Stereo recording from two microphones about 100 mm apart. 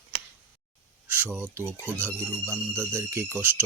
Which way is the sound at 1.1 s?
20° right (ahead or behind).